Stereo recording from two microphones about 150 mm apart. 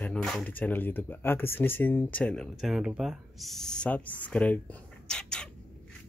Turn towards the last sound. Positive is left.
turn(degrees=5)  # may be behind; listen again after turning